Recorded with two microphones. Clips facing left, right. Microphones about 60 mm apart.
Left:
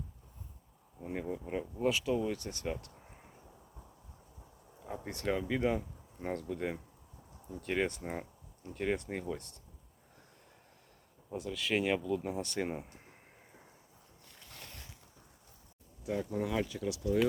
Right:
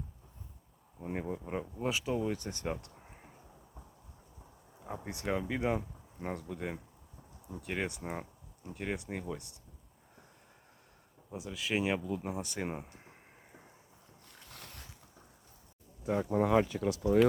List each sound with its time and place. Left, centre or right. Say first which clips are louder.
1.0 s speech: right 1 dB; right
4.8 s speech: left 1 dB; centre
11.3 s speech: left 2 dB; centre
16.0 s speech: right 5 dB; right